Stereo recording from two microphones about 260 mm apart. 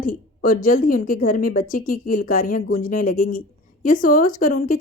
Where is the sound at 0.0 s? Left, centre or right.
Left.